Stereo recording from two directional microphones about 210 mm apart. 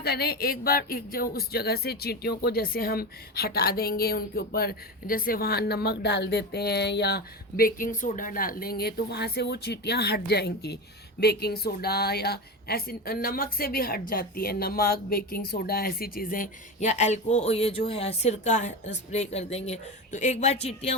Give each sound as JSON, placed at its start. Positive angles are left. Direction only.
{"t": 0.0, "sound": "speech", "side_deg": 50}